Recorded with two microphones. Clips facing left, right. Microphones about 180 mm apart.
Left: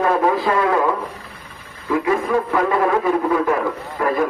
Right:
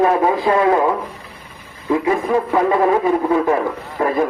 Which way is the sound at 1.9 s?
25° right (ahead or behind).